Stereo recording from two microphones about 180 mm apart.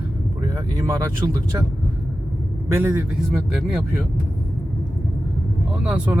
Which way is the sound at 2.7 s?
15° right (ahead or behind).